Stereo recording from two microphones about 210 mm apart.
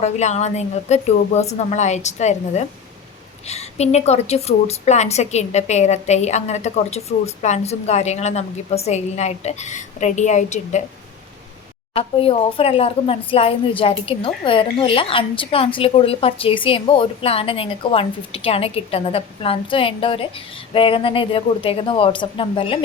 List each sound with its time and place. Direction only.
0.0 s a woman's voice: 30° left (ahead or behind)
11.9 s a woman's voice: 25° left (ahead or behind)